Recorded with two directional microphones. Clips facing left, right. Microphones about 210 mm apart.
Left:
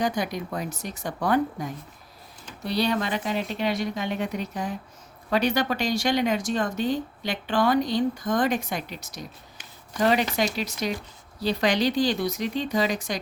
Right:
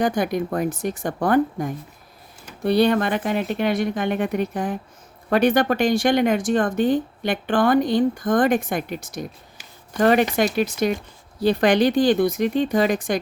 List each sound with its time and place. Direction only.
0.0 s speech: 55° right (ahead or behind)